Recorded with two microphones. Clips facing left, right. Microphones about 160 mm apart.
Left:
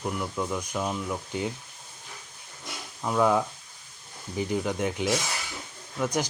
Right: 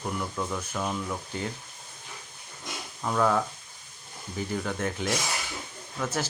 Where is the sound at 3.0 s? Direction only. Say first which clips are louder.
Left 2 dB; 10° left (ahead or behind).